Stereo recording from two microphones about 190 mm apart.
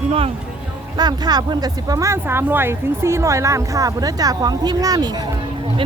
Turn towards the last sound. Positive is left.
turn(degrees=-20)  # may be behind; listen again after turning